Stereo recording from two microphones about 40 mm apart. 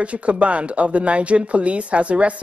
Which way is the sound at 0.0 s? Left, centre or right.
Right.